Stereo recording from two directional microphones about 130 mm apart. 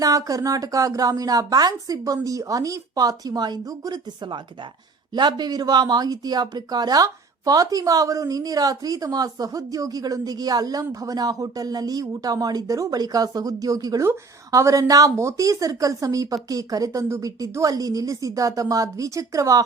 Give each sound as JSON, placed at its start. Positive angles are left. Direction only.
{"t": 0.0, "sound": "speech", "side_deg": -25}